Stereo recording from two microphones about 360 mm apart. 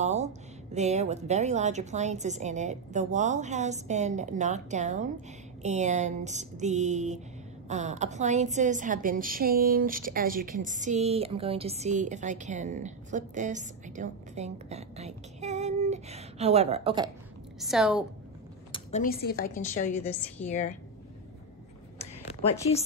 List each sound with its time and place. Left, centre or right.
0.0 s a woman's voice: centre
17.6 s a woman's voice: centre
18.7 s a woman's voice: centre